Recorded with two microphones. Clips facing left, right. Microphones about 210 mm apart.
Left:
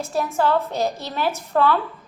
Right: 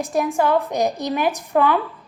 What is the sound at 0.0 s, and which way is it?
A woman's voice, 15° right (ahead or behind).